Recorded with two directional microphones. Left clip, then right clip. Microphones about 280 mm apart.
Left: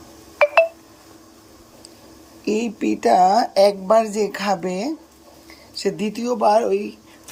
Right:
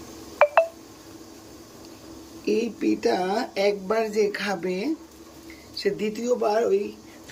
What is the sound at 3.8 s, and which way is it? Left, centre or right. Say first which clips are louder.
Speech: left 9 dB; left.